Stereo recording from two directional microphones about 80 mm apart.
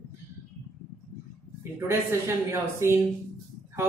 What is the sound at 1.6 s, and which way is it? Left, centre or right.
Speech, right.